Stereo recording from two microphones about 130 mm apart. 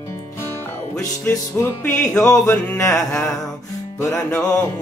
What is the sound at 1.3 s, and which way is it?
Music, 20° left (ahead or behind).